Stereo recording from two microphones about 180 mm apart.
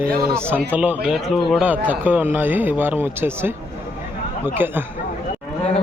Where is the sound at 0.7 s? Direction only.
10° right (ahead or behind).